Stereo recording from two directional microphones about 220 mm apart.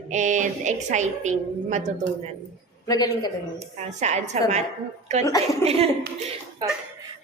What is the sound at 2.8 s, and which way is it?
Speech, 15° left (ahead or behind).